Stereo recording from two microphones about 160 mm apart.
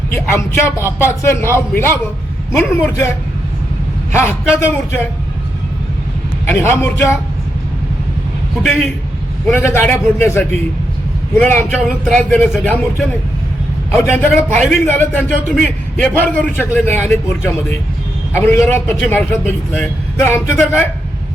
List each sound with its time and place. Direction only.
0.1 s a man's voice: 15° left (ahead or behind)
4.1 s a man's voice: 15° left (ahead or behind)
6.4 s a man's voice: 15° left (ahead or behind)
9.5 s a man's voice: 15° left (ahead or behind)